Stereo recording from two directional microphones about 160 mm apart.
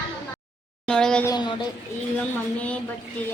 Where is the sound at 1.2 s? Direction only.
25° left (ahead or behind).